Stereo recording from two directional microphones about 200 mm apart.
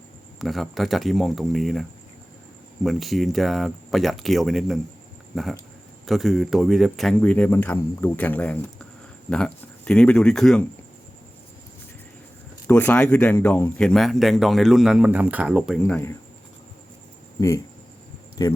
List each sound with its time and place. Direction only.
0.3 s speech: centre (ahead or behind)
12.6 s speech: 10° left (ahead or behind)
15.8 s speech: 10° left (ahead or behind)
18.4 s speech: 20° left (ahead or behind)